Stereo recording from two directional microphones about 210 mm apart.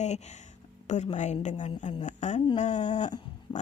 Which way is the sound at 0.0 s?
35° left (ahead or behind).